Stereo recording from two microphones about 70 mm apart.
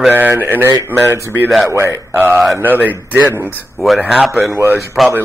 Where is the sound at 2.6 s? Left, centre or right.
Right.